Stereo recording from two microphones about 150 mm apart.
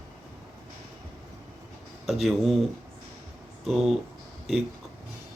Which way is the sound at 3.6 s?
Centre (ahead or behind).